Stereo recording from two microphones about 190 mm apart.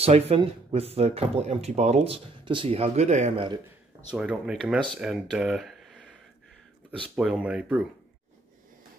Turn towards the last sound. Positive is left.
turn(degrees=-5)  # may be behind; listen again after turning